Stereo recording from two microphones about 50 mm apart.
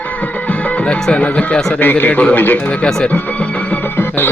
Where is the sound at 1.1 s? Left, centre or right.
Left.